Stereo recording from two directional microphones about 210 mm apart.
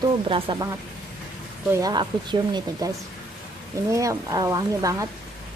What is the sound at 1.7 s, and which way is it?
Speech, 15° right (ahead or behind).